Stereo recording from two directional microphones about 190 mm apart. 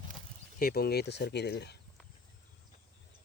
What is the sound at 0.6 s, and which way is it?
Speech, 55° left (ahead or behind).